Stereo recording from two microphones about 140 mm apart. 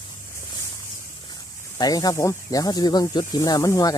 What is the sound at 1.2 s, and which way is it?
Speech, 30° left (ahead or behind).